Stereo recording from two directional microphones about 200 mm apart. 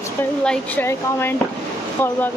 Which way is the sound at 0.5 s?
10° left (ahead or behind).